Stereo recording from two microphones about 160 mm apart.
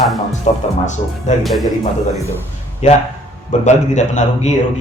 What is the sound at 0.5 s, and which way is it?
Speech, 45° left (ahead or behind).